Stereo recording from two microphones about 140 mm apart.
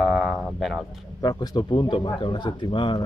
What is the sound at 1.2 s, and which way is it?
Speech, 30° left (ahead or behind).